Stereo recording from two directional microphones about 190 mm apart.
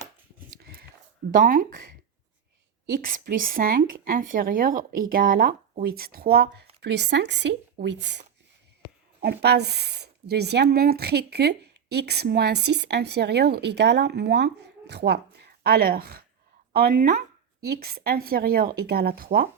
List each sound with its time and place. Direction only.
1.3 s speech: 45° right (ahead or behind)
2.9 s speech: 50° right (ahead or behind); by 8.2 s 65° right (ahead or behind)
9.2 s speech: 60° right (ahead or behind)